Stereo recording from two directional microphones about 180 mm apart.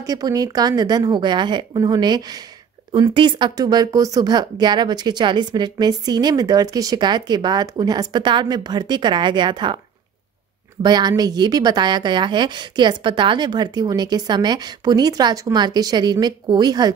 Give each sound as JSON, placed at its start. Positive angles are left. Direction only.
{"t": 0.0, "sound": "speech", "side_deg": -20}
{"t": 10.8, "sound": "speech", "side_deg": -25}